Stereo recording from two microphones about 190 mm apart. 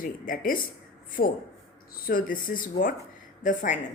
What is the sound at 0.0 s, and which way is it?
Speech, 50° left (ahead or behind).